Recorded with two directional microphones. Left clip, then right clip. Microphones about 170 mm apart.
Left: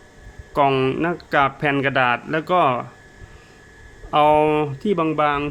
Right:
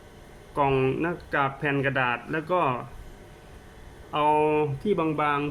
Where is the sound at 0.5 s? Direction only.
60° left (ahead or behind).